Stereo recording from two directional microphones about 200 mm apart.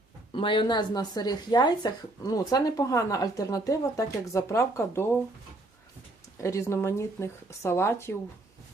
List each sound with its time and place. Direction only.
0.3 s speech: 25° left (ahead or behind)
6.4 s speech: 15° left (ahead or behind)